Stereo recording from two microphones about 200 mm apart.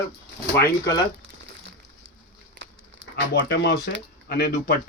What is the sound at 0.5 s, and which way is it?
Speech, 15° left (ahead or behind).